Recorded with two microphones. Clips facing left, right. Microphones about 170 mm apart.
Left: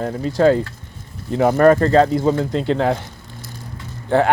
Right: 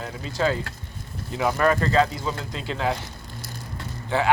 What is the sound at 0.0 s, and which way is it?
Speech, 50° left (ahead or behind).